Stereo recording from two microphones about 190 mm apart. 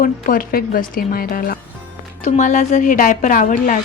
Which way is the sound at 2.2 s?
40° left (ahead or behind).